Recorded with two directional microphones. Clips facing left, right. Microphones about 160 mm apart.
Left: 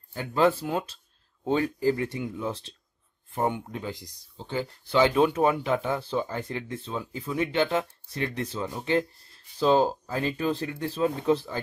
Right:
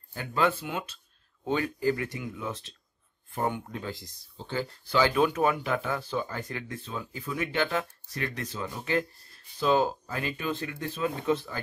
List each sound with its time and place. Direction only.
0.2 s speech: 30° left (ahead or behind)